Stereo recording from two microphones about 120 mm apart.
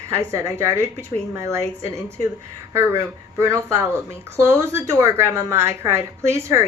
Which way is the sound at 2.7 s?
20° right (ahead or behind).